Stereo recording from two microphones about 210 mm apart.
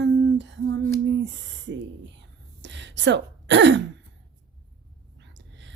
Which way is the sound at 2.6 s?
60° right (ahead or behind).